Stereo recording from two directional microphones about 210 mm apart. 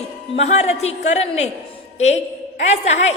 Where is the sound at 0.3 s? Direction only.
35° left (ahead or behind).